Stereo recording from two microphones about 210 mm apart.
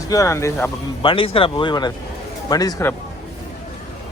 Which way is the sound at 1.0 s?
25° left (ahead or behind).